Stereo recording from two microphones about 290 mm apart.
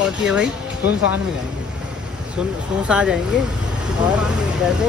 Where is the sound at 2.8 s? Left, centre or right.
Centre.